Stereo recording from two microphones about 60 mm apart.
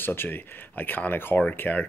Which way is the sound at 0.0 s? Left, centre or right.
Left.